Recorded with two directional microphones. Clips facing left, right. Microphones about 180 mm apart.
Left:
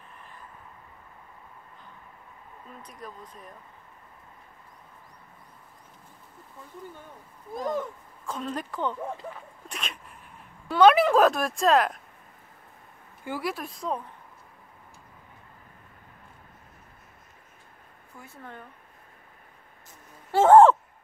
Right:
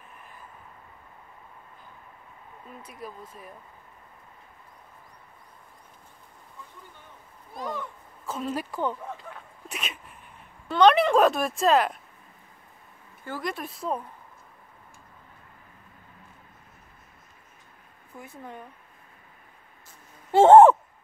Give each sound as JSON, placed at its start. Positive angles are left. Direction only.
{"t": 2.8, "sound": "speech", "side_deg": -5}
{"t": 7.5, "sound": "speech", "side_deg": 45}
{"t": 8.3, "sound": "speech", "side_deg": -5}
{"t": 9.3, "sound": "a sound", "side_deg": -5}
{"t": 10.7, "sound": "a woman's voice", "side_deg": 5}
{"t": 13.2, "sound": "speech", "side_deg": 10}
{"t": 18.2, "sound": "speech", "side_deg": -15}
{"t": 20.2, "sound": "speech", "side_deg": -25}